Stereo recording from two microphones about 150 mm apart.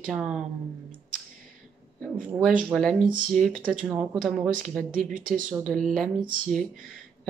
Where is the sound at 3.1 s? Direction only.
60° right (ahead or behind).